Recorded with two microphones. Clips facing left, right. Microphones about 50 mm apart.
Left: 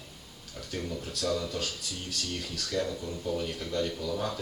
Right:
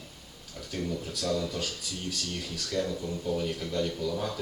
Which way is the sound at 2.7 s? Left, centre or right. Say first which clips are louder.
Right 1 dB; centre.